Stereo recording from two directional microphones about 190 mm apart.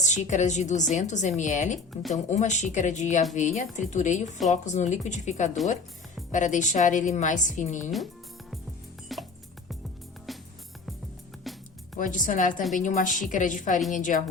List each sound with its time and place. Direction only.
0.0 s a woman's voice: 40° left (ahead or behind)
9.1 s music: centre (ahead or behind)
10.3 s music: centre (ahead or behind)
11.5 s music: centre (ahead or behind)
11.9 s a woman's voice: 45° left (ahead or behind)